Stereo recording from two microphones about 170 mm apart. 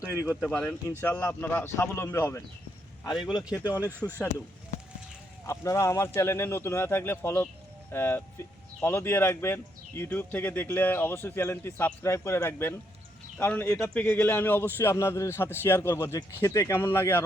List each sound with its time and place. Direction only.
0.4 s speech: 5° left (ahead or behind); by 3.8 s 20° left (ahead or behind)
5.5 s speech: 15° left (ahead or behind)